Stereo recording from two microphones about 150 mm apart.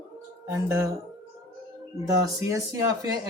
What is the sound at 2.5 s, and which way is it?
Speech, 20° right (ahead or behind).